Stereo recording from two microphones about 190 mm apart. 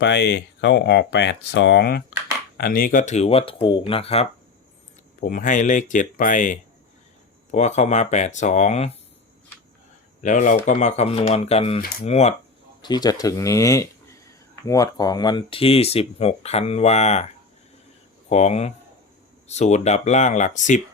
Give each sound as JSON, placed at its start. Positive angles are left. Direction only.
{"t": 0.0, "sound": "speech", "side_deg": 65}
{"t": 5.2, "sound": "speech", "side_deg": 45}
{"t": 10.2, "sound": "speech", "side_deg": 40}
{"t": 12.8, "sound": "speech", "side_deg": 20}
{"t": 18.3, "sound": "speech", "side_deg": 35}